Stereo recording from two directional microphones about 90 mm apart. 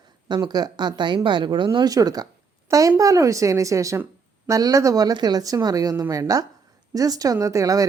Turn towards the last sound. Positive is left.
turn(degrees=-40)  # may be behind; listen again after turning